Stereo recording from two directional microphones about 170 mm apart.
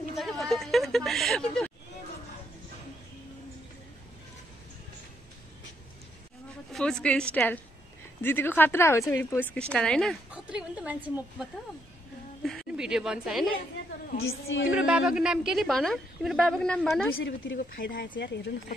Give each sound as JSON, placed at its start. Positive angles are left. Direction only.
{"t": 0.1, "sound": "a sound", "side_deg": 0}
{"t": 6.7, "sound": "a woman's voice", "side_deg": 5}
{"t": 10.3, "sound": "a woman's voice", "side_deg": -5}
{"t": 12.4, "sound": "a woman's voice", "side_deg": 0}
{"t": 14.7, "sound": "a woman's voice", "side_deg": -5}
{"t": 17.2, "sound": "speech", "side_deg": 90}